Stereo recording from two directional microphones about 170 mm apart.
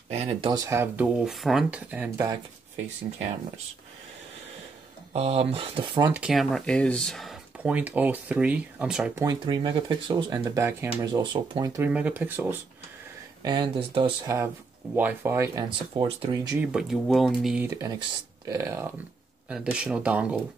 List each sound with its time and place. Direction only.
0.1 s speech: 35° right (ahead or behind)
0.5 s speech: 20° right (ahead or behind)
5.1 s speech: 40° right (ahead or behind)
6.1 s speech: 5° right (ahead or behind)
9.2 s speech: 25° right (ahead or behind)
11.8 s speech: 10° right (ahead or behind)
13.4 s speech: 25° right (ahead or behind)
14.2 s speech: 20° right (ahead or behind)
16.0 s speech: 30° right (ahead or behind)
16.5 s speech: centre (ahead or behind)
17.6 s speech: 20° right (ahead or behind)
19.5 s speech: 5° right (ahead or behind)